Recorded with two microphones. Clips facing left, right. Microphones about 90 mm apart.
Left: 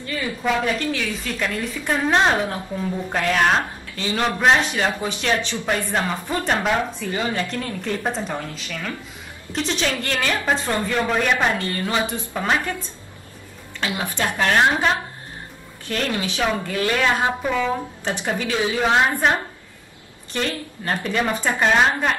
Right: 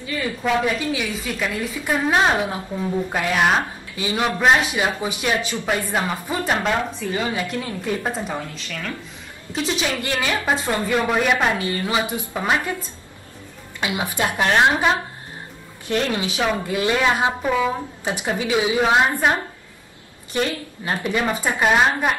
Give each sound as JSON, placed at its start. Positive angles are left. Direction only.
{"t": 0.0, "sound": "a woman's voice", "side_deg": -5}
{"t": 9.5, "sound": "a woman's voice", "side_deg": -5}
{"t": 13.7, "sound": "a woman's voice", "side_deg": -15}
{"t": 15.9, "sound": "a woman's voice", "side_deg": -20}
{"t": 20.3, "sound": "a woman's voice", "side_deg": -15}